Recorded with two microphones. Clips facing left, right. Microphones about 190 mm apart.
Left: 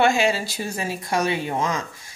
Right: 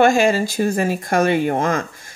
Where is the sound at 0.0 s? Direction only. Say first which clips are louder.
Right 5 dB; 45° right (ahead or behind).